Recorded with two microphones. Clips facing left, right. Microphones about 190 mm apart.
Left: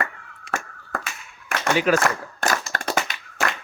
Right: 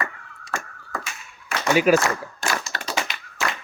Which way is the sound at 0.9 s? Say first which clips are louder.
Left 2 dB; 55° left (ahead or behind).